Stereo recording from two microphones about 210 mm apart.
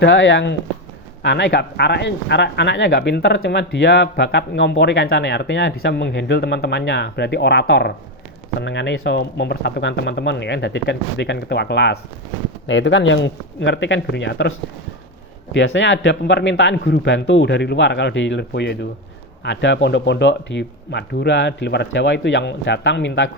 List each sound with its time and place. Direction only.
0.0 s speech: 60° left (ahead or behind)
15.5 s speech: 60° left (ahead or behind)